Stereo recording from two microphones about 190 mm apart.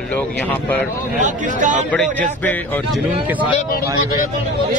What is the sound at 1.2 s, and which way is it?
Speech, 40° right (ahead or behind).